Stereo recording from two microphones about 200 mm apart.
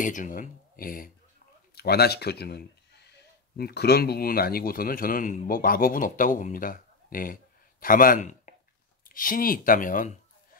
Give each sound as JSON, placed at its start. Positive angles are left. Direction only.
{"t": 0.0, "sound": "a man's voice", "side_deg": 40}